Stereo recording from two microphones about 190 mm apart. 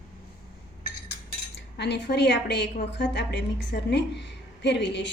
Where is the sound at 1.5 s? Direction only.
65° left (ahead or behind).